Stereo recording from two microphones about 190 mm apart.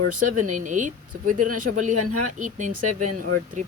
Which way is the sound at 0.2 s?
45° right (ahead or behind).